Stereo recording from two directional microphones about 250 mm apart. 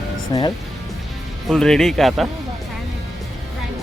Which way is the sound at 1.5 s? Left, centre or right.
Centre.